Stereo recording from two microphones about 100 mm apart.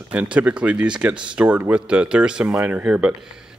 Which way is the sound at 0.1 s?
15° right (ahead or behind).